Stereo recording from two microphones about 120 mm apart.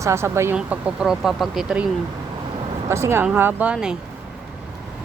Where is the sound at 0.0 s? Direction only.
25° right (ahead or behind).